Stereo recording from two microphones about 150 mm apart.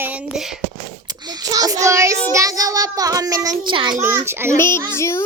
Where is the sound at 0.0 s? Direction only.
10° right (ahead or behind).